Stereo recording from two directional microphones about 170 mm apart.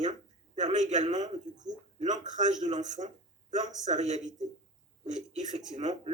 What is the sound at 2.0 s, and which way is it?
Speech, 45° right (ahead or behind).